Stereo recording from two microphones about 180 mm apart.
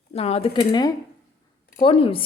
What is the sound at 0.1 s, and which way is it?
Speech, 35° left (ahead or behind).